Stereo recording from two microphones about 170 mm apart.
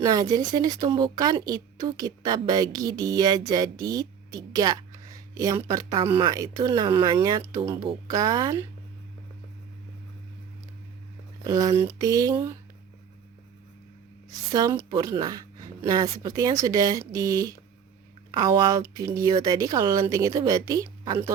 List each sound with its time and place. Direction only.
0.0 s a woman's voice: 20° right (ahead or behind)
11.4 s a woman's voice: 20° right (ahead or behind)
14.3 s a woman's voice: 20° right (ahead or behind)